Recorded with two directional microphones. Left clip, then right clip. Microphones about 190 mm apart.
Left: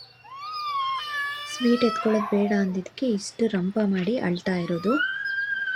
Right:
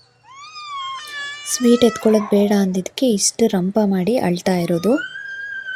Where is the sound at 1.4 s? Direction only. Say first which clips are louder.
Right 7 dB; 30° right (ahead or behind).